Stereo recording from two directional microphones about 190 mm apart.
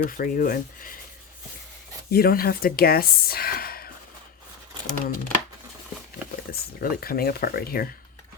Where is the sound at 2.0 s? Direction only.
55° left (ahead or behind).